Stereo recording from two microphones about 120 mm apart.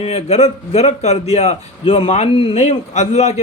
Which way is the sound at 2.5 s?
70° left (ahead or behind).